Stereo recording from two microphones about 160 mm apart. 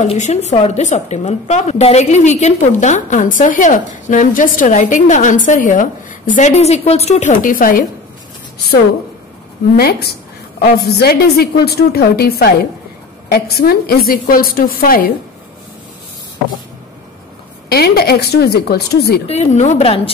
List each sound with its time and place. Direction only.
0.0 s a woman's voice: 40° left (ahead or behind); by 7.8 s 60° left (ahead or behind)
9.8 s a woman's voice: 75° left (ahead or behind)
17.6 s speech: 80° left
19.2 s a woman's voice: 45° left (ahead or behind)